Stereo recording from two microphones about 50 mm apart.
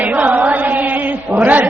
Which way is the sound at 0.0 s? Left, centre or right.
Right.